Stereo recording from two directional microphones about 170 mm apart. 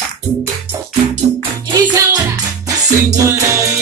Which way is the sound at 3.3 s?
15° right (ahead or behind).